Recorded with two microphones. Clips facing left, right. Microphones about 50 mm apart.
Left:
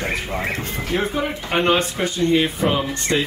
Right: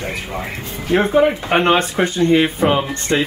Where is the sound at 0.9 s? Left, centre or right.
Right.